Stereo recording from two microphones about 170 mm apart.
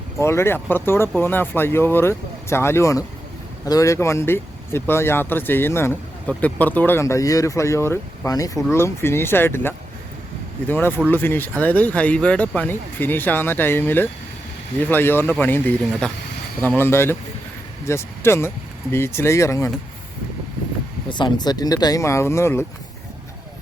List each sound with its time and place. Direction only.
0.2 s speech: 15° left (ahead or behind)
21.1 s speech: 25° left (ahead or behind)